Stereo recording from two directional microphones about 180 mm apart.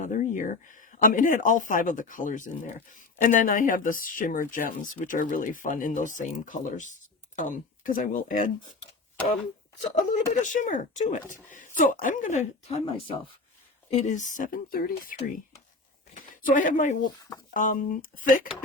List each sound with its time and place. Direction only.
0.0 s speech: 45° left (ahead or behind)
9.9 s speech: 45° left (ahead or behind)